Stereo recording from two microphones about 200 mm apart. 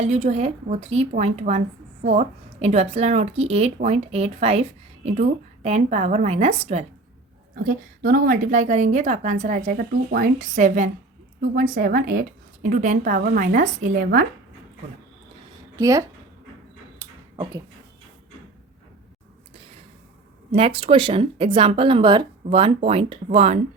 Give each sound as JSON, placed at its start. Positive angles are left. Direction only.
{"t": 0.0, "sound": "a woman's voice", "side_deg": -35}
{"t": 7.6, "sound": "a woman's voice", "side_deg": -45}
{"t": 15.7, "sound": "speech", "side_deg": -15}
{"t": 17.0, "sound": "a sound", "side_deg": -10}
{"t": 20.5, "sound": "speech", "side_deg": -30}